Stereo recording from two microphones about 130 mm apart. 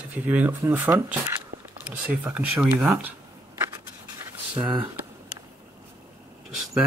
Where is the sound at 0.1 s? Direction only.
15° right (ahead or behind).